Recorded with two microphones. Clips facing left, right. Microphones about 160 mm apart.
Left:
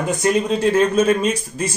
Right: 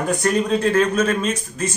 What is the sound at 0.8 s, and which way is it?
Speech, 30° left (ahead or behind).